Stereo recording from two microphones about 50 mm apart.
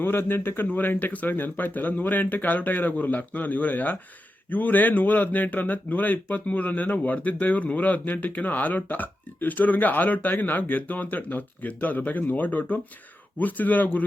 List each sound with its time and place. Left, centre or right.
0.0 s speech: left